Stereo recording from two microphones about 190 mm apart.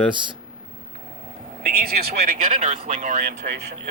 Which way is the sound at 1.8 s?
55° right (ahead or behind).